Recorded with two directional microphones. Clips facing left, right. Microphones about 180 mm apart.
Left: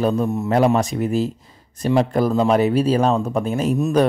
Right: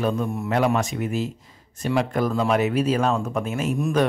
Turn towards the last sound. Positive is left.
turn(degrees=35)  # may be behind; listen again after turning